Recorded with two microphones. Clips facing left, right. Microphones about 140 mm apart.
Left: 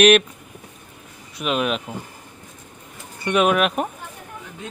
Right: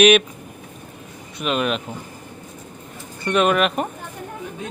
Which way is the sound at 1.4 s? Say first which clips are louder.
Even; centre (ahead or behind).